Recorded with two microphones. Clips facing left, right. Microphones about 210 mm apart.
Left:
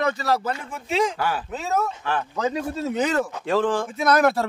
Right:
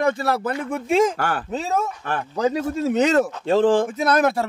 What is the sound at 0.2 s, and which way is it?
Speech, 55° right (ahead or behind).